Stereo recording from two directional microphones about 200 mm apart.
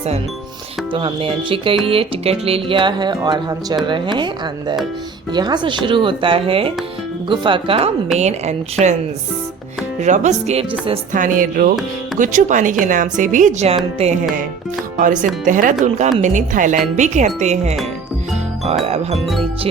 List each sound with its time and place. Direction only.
0.9 s speech: 25° right (ahead or behind)
5.3 s a woman's voice: 20° right (ahead or behind)
10.0 s a woman's voice: 35° right (ahead or behind)
11.1 s a woman's voice: 40° right (ahead or behind)
18.9 s a woman's voice: 30° right (ahead or behind)
19.2 s speech: centre (ahead or behind)